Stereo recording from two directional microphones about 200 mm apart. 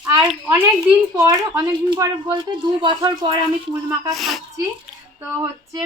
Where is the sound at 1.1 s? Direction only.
15° right (ahead or behind).